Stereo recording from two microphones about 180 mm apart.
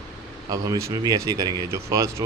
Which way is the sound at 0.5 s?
20° right (ahead or behind).